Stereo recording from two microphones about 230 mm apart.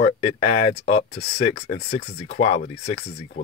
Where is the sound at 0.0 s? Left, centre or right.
Left.